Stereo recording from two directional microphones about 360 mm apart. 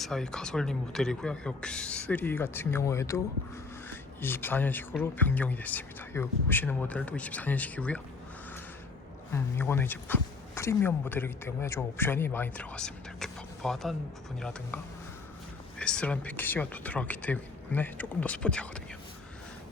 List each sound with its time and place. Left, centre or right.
0.0 s speech: centre
9.3 s speech: centre
15.8 s speech: centre